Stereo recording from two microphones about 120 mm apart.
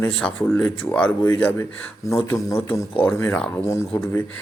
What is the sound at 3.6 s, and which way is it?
Speech, 25° left (ahead or behind).